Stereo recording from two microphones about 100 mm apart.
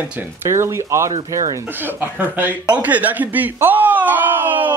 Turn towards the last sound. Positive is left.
turn(degrees=-15)  # may be behind; listen again after turning